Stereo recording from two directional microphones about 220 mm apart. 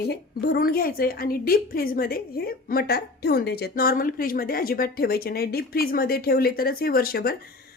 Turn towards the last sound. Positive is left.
turn(degrees=45)  # may be behind; listen again after turning